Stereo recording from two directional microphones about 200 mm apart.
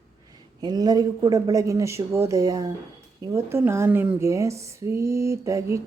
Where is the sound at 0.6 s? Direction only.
20° right (ahead or behind).